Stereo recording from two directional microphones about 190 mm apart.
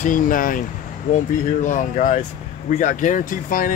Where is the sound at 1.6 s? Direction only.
40° left (ahead or behind).